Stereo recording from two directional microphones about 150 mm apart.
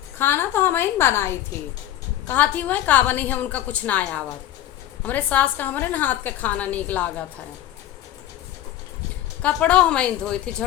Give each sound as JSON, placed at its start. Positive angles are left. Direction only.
{"t": 0.2, "sound": "a woman's voice", "side_deg": 15}
{"t": 9.4, "sound": "a woman's voice", "side_deg": 10}